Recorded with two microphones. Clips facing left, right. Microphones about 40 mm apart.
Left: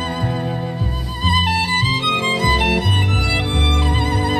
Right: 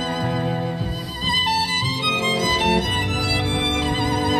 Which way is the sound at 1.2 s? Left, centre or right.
Centre.